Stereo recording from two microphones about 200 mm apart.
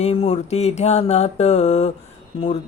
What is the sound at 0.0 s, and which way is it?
Speech, 30° left (ahead or behind).